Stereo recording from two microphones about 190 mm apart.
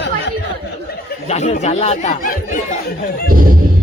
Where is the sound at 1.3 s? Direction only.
35° left (ahead or behind).